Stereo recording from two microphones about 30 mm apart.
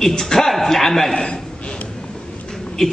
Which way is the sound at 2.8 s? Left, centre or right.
Centre.